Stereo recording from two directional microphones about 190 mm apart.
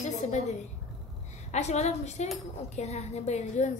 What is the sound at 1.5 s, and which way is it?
A woman's voice, 35° left (ahead or behind).